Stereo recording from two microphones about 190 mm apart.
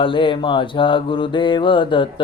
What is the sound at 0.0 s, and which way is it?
Mantra, 25° left (ahead or behind).